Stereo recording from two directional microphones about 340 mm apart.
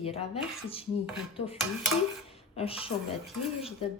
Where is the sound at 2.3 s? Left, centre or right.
Centre.